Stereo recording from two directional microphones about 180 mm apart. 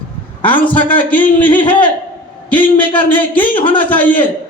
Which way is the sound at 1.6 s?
30° left (ahead or behind).